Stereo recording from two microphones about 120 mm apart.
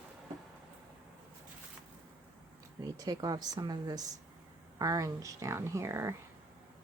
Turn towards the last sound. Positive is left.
turn(degrees=-25)  # may be behind; listen again after turning